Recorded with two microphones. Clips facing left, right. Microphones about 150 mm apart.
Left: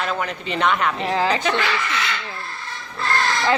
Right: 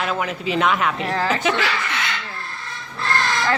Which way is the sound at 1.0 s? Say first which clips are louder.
Left 2 dB; 15° left (ahead or behind).